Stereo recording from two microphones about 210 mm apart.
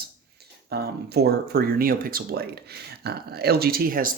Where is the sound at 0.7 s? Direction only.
50° right (ahead or behind).